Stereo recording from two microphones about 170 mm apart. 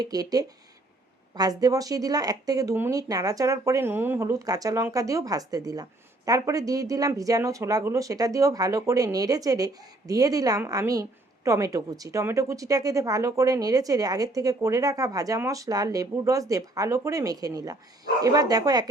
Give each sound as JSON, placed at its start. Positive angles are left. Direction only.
{"t": 0.0, "sound": "speech", "side_deg": -20}